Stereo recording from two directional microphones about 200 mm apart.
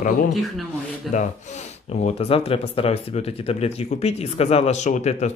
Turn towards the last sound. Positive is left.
turn(degrees=35)  # may be behind; listen again after turning